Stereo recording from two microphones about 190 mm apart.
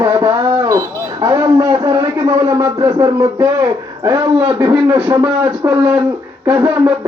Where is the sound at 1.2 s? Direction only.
20° right (ahead or behind).